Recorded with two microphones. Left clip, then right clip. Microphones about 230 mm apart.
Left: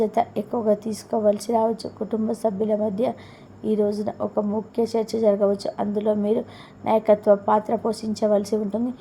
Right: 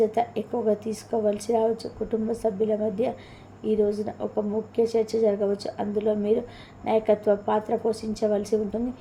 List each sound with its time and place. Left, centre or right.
0.0 s a woman's voice: left